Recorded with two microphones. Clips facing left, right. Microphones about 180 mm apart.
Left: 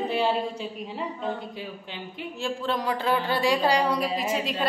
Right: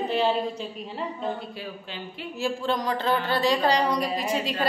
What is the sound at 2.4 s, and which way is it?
A woman's voice, centre (ahead or behind).